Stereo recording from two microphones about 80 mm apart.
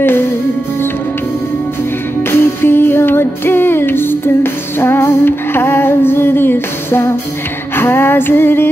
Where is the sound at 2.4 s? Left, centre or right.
Left.